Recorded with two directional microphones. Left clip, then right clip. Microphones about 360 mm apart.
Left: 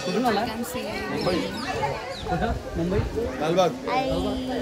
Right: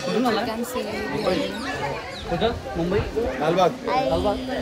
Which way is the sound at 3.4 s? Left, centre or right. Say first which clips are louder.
Right 2 dB; centre.